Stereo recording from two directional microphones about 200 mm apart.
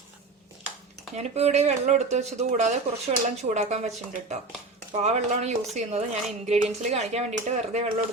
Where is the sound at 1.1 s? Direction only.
35° right (ahead or behind).